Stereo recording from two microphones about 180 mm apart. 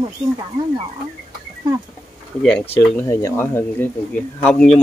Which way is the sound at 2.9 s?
15° left (ahead or behind).